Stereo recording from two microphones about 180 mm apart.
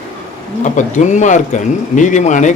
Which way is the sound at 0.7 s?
40° left (ahead or behind).